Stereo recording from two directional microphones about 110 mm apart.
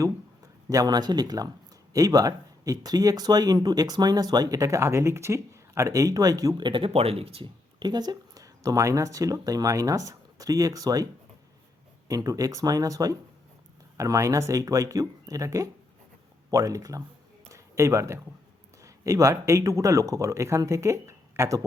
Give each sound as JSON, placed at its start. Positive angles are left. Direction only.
{"t": 0.7, "sound": "speech", "side_deg": -35}
{"t": 7.8, "sound": "speech", "side_deg": -40}
{"t": 17.5, "sound": "a sound", "side_deg": -30}
{"t": 18.8, "sound": "a man's voice", "side_deg": -30}